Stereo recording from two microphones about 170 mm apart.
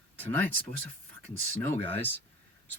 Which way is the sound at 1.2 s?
10° left (ahead or behind).